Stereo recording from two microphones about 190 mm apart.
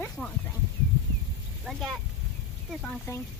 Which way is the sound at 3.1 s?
15° left (ahead or behind).